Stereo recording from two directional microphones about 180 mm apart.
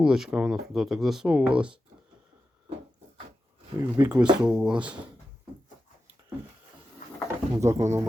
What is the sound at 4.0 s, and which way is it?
Speech, 10° right (ahead or behind).